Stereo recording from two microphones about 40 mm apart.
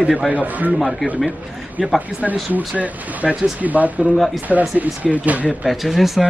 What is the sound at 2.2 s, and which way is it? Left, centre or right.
Speech, right.